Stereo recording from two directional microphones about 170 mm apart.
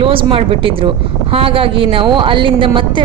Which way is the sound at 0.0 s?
30° right (ahead or behind).